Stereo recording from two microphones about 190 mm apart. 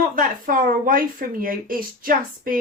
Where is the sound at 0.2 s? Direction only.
50° right (ahead or behind).